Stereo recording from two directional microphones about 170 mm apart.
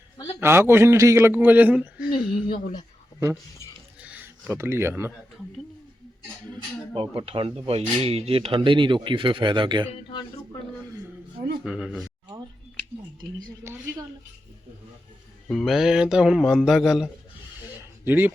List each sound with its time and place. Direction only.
0.3 s a man's voice: 15° right (ahead or behind)
2.0 s speech: 55° left (ahead or behind)
4.0 s speech: 10° right (ahead or behind)
6.5 s speech: 30° right (ahead or behind)
11.6 s speech: 5° right (ahead or behind)
15.4 s speech: centre (ahead or behind)
18.0 s speech: 10° right (ahead or behind)